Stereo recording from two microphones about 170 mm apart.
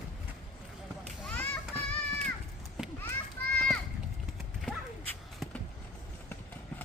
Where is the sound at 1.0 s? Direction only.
10° left (ahead or behind).